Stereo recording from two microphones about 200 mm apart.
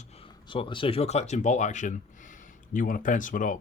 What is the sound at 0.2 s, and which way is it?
Speech, 25° left (ahead or behind).